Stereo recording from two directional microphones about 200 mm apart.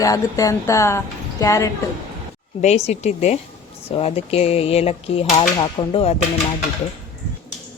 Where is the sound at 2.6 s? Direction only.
35° left (ahead or behind).